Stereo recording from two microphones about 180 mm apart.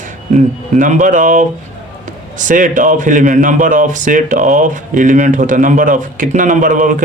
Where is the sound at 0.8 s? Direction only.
45° right (ahead or behind).